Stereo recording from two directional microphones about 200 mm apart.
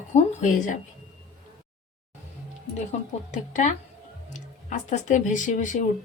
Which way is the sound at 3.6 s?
35° left (ahead or behind).